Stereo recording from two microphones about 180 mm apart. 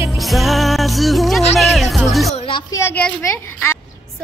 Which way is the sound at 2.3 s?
30° left (ahead or behind).